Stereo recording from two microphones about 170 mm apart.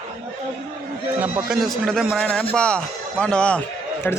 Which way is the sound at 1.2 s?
5° right (ahead or behind).